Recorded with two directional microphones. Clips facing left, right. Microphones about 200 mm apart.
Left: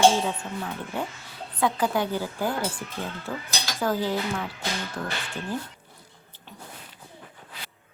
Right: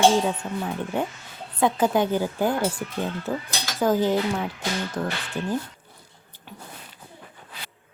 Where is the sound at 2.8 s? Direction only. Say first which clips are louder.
Right 5 dB; 60° right (ahead or behind).